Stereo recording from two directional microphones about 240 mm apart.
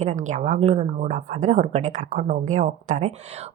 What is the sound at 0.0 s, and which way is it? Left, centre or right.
A woman's voice, right.